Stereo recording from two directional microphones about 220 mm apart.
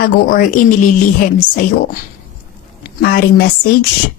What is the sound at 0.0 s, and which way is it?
A woman's voice, 40° left (ahead or behind).